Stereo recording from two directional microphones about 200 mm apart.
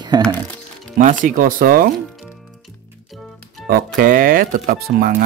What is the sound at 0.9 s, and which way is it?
Speech, 40° right (ahead or behind).